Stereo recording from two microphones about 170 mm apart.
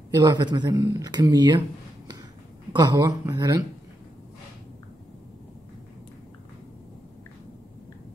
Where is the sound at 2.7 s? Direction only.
25° right (ahead or behind).